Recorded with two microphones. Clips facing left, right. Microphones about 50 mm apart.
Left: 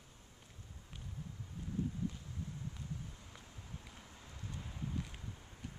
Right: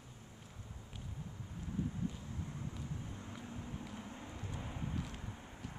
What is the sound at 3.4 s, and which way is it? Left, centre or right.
Vehicle, right.